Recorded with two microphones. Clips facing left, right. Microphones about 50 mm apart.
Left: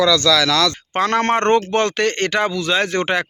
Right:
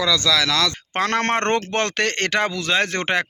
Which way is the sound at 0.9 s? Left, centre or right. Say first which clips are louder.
Left 3 dB; right.